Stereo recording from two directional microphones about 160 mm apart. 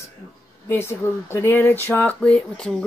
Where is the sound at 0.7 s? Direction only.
15° left (ahead or behind).